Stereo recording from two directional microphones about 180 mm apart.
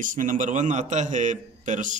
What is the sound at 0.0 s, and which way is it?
A man's voice, 45° right (ahead or behind).